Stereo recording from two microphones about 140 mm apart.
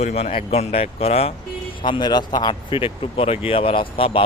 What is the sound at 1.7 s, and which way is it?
Speech, 35° left (ahead or behind).